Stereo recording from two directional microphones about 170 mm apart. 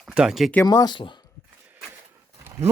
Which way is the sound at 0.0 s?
5° right (ahead or behind).